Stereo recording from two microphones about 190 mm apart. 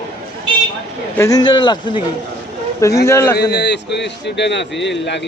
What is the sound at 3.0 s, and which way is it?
Speech, 15° left (ahead or behind).